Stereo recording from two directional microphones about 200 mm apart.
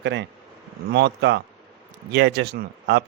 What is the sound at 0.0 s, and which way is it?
Speech, 60° right (ahead or behind).